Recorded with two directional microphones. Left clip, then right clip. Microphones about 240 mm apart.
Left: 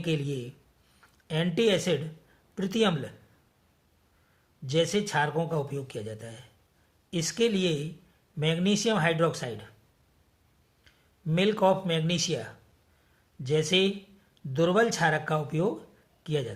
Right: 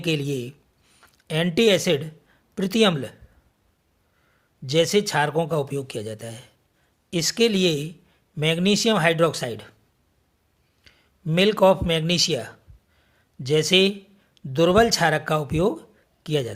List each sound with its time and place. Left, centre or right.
0.0 s speech: right
4.6 s speech: right
10.8 s a man's voice: right